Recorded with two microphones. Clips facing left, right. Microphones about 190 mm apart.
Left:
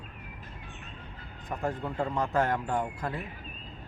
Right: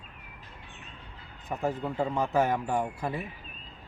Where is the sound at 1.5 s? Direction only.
5° right (ahead or behind).